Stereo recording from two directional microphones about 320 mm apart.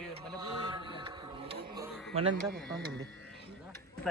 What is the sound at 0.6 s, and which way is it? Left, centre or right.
Mantra, centre.